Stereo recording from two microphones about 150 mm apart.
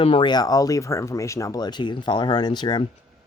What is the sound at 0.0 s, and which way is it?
Speech, 35° left (ahead or behind).